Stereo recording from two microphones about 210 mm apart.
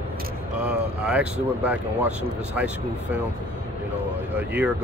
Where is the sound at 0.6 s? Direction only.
5° right (ahead or behind).